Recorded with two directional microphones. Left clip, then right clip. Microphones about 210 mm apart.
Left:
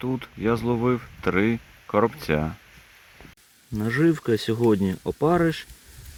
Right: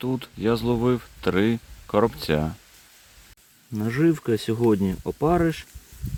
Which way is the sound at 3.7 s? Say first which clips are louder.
Even; centre (ahead or behind).